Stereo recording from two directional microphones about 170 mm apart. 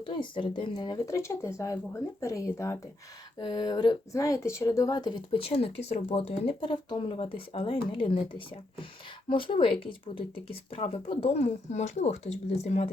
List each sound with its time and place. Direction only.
0.0 s speech: 30° left (ahead or behind)